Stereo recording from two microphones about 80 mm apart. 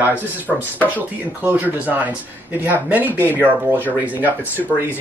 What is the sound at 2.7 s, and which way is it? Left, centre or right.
Speech, right.